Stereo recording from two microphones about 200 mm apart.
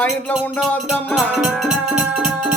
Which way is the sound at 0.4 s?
5° left (ahead or behind).